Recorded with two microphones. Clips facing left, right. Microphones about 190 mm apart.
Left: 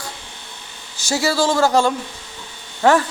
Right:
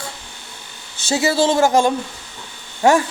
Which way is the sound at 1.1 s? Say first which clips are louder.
Right 2 dB; 20° right (ahead or behind).